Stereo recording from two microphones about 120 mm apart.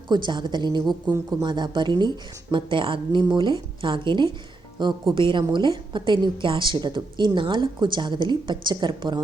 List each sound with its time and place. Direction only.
0.1 s a woman's voice: 40° right (ahead or behind)